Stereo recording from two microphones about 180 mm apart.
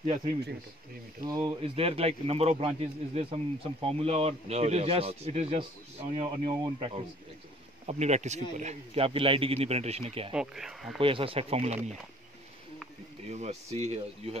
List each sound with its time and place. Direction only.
0.0 s speech: 35° right (ahead or behind)
6.1 s speech: 25° right (ahead or behind)
10.3 s speech: 5° right (ahead or behind)
11.0 s speech: 30° right (ahead or behind)
13.3 s speech: 40° right (ahead or behind)